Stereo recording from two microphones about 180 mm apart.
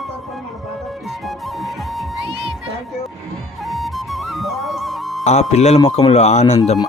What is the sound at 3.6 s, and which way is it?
Music, centre (ahead or behind).